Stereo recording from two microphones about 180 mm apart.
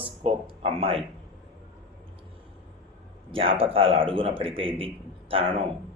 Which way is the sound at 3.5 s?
30° right (ahead or behind).